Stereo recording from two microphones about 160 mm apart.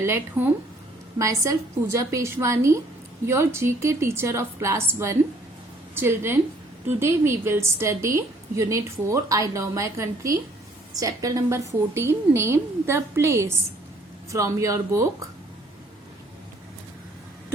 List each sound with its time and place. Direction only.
0.0 s a woman's voice: 15° right (ahead or behind)